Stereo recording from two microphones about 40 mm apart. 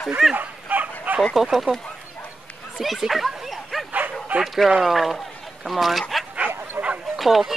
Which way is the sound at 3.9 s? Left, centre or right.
Right.